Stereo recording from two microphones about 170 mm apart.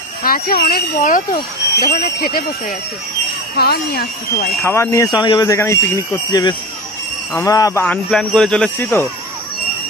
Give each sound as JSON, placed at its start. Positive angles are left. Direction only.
{"t": 0.2, "sound": "speech", "side_deg": 60}
{"t": 4.6, "sound": "speech", "side_deg": 15}
{"t": 8.1, "sound": "speech", "side_deg": 5}